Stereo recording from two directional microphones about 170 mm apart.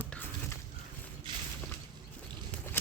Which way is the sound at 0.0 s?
10° left (ahead or behind).